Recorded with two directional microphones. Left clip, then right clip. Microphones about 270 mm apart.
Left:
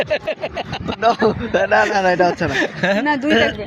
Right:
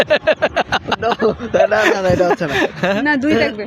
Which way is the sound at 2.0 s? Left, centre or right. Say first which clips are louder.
Even; centre.